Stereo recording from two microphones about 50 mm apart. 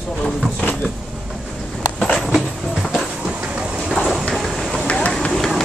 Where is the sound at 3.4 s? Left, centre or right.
Centre.